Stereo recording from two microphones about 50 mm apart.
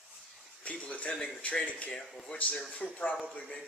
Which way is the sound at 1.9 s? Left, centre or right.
Centre.